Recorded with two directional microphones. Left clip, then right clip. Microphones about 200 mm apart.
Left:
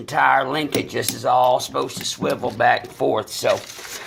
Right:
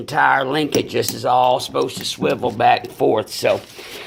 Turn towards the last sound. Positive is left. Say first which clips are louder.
# right 2 dB
turn(degrees=-30)  # may be behind; listen again after turning